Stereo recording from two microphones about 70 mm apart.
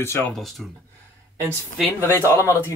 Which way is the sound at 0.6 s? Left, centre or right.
Centre.